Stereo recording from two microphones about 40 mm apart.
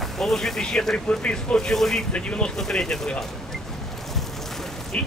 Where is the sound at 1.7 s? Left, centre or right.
Centre.